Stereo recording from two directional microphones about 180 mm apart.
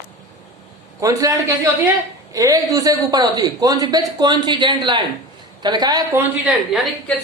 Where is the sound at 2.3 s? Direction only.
20° right (ahead or behind).